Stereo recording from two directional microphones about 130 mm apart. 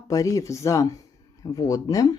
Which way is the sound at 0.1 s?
25° left (ahead or behind).